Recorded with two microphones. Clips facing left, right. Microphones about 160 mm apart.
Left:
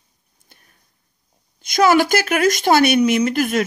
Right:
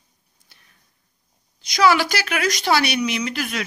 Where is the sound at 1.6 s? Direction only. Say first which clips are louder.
Left 3 dB; 50° left (ahead or behind).